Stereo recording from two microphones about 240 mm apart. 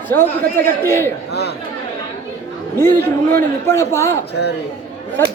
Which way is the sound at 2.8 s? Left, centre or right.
Centre.